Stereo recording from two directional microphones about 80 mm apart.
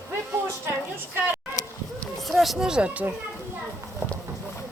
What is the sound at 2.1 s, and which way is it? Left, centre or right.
Speech, centre.